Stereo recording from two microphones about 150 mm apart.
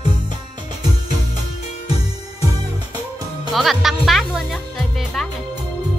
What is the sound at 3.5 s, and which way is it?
Music, centre (ahead or behind).